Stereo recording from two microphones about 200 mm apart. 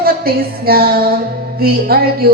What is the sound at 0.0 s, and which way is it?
Child singing, 50° right (ahead or behind).